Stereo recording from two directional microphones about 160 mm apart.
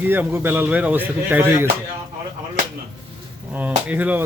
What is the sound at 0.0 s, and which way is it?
Speech, 10° right (ahead or behind).